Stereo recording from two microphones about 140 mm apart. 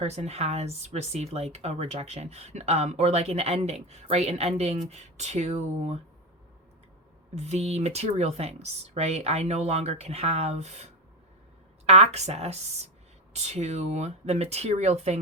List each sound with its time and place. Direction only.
0.0 s speech: 50° right (ahead or behind)
7.3 s speech: 50° right (ahead or behind)
11.9 s speech: 50° right (ahead or behind)